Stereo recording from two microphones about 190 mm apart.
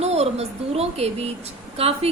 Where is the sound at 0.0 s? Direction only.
35° right (ahead or behind).